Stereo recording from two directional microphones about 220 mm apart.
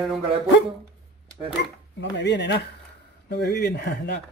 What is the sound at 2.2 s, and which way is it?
A man's voice, 50° left (ahead or behind).